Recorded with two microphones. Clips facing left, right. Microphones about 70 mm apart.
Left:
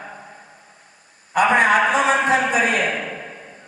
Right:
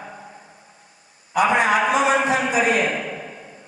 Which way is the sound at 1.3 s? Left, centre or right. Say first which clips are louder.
Left 2 dB; left.